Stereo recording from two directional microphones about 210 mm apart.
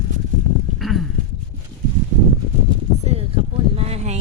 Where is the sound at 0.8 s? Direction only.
Centre (ahead or behind).